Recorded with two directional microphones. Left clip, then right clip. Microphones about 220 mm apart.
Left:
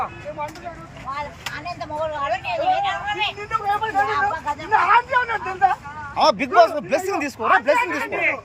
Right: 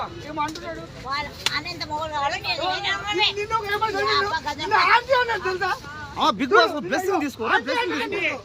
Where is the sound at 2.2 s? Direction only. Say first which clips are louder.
Even; 15° right (ahead or behind).